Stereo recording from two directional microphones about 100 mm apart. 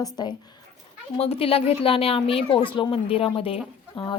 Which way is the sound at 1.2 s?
80° left.